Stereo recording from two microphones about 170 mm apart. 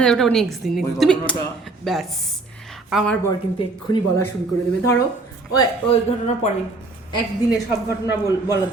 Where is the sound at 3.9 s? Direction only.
20° left (ahead or behind).